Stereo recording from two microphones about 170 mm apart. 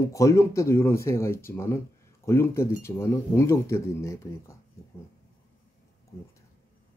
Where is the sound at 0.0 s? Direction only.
20° left (ahead or behind).